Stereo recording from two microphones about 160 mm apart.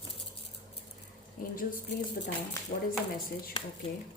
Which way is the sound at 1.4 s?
60° left (ahead or behind).